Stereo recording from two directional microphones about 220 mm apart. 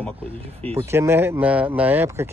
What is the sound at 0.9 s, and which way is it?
Speech, 10° right (ahead or behind).